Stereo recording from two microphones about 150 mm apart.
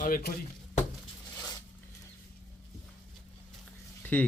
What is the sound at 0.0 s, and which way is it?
Speech, 80° left.